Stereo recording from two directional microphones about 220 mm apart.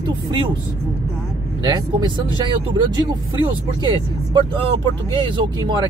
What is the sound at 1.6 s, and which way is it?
Speech, 20° right (ahead or behind).